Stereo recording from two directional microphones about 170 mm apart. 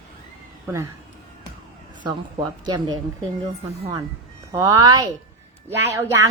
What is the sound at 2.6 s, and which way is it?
Speech, 25° right (ahead or behind).